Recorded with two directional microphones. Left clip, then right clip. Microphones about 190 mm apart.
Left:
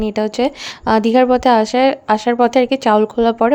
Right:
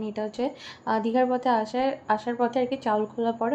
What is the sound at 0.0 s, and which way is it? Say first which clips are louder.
Speech: left 12 dB; 70° left (ahead or behind).